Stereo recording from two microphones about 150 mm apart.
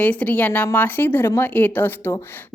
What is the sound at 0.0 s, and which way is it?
Speech, 10° left (ahead or behind).